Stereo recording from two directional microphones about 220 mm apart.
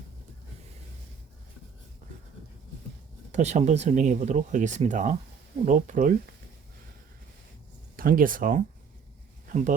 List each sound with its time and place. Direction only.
3.3 s speech: 30° right (ahead or behind)
7.9 s speech: 40° right (ahead or behind)